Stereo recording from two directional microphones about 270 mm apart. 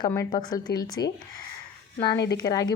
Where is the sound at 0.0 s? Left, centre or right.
Centre.